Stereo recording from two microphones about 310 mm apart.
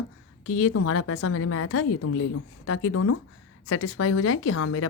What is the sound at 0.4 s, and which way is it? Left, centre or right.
A woman's voice, left.